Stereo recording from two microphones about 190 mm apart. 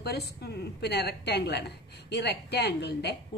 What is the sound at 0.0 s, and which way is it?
A woman's voice, 60° left (ahead or behind).